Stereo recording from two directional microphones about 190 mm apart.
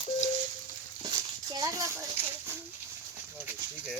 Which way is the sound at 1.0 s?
20° right (ahead or behind).